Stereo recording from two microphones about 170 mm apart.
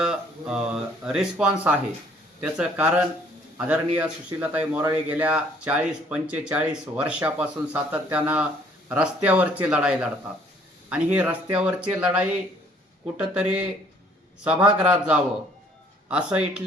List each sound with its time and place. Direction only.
0.0 s speech: 5° right (ahead or behind)